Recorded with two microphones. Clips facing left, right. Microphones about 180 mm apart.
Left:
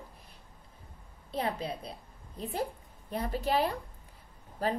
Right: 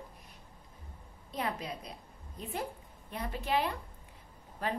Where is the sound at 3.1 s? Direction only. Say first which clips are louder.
Left 3 dB; 35° left (ahead or behind).